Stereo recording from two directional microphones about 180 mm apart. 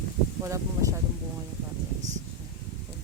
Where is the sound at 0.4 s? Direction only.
20° right (ahead or behind).